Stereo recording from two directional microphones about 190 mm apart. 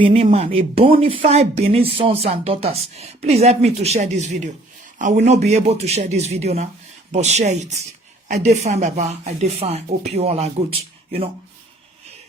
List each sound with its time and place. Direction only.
0.0 s speech: 30° right (ahead or behind)